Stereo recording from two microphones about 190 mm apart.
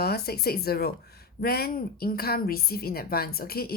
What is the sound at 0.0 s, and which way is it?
A woman's voice, 55° left (ahead or behind).